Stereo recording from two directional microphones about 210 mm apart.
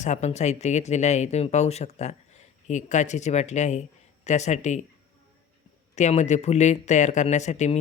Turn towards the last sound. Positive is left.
turn(degrees=35)  # may be behind; listen again after turning